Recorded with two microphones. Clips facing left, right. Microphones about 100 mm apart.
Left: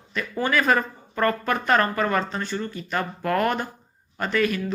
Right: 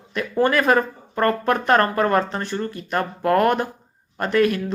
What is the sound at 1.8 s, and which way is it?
Speech, 5° right (ahead or behind).